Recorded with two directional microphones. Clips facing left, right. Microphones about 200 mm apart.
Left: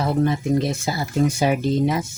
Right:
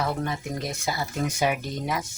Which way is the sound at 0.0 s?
25° left (ahead or behind).